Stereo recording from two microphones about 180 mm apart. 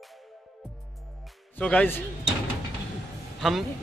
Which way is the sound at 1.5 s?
10° left (ahead or behind).